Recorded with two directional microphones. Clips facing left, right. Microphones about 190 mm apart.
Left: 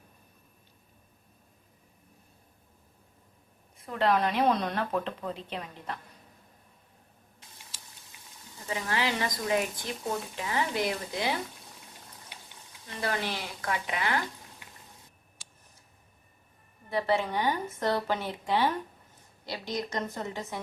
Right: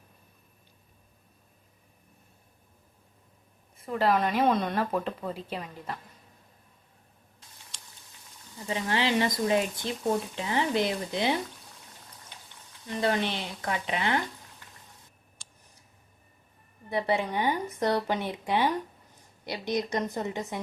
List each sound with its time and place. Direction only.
3.8 s speech: 5° right (ahead or behind)
8.7 s speech: 25° right (ahead or behind)
13.0 s speech: 25° right (ahead or behind)
15.4 s a sound: centre (ahead or behind)
16.9 s speech: 15° right (ahead or behind)